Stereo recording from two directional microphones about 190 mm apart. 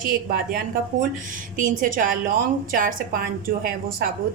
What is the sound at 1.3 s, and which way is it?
A woman's voice, 45° right (ahead or behind).